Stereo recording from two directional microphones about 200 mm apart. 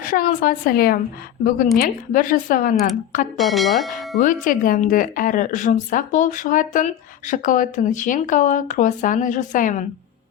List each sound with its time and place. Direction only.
0.0 s a woman's voice: 45° left (ahead or behind)
3.3 s speech: centre (ahead or behind)
4.2 s a woman's voice: 40° left (ahead or behind)